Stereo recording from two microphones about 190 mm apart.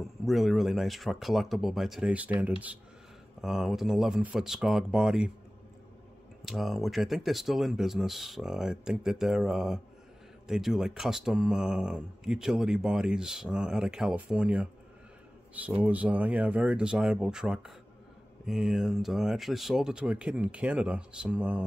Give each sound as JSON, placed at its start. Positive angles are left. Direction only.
{"t": 0.0, "sound": "speech", "side_deg": 0}
{"t": 6.4, "sound": "speech", "side_deg": 0}